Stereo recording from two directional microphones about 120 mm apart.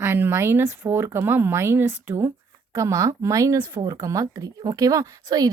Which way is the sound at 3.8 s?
40° right (ahead or behind).